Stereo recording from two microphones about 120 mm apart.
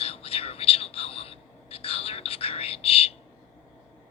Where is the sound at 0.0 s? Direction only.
55° left (ahead or behind).